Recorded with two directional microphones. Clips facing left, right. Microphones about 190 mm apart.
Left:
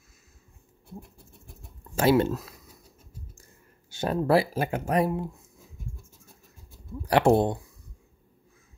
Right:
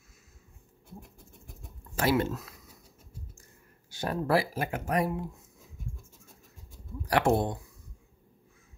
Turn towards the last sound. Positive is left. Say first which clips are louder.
# left 5 dB
turn(degrees=30)  # may be behind; listen again after turning